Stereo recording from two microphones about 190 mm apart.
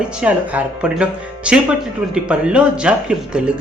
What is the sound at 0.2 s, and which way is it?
Speech, 5° right (ahead or behind).